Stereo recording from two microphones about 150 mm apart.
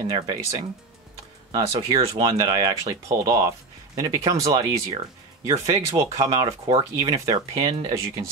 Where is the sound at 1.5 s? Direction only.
35° right (ahead or behind).